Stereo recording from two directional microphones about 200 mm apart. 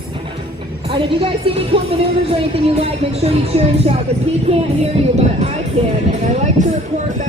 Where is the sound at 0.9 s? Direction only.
25° right (ahead or behind).